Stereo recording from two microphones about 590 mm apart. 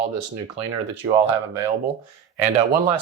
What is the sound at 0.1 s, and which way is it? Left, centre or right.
Speech, right.